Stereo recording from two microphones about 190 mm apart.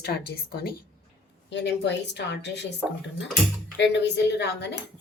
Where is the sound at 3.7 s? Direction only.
65° left (ahead or behind).